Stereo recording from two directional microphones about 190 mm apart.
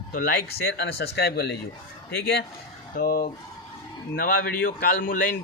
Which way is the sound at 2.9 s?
50° left (ahead or behind).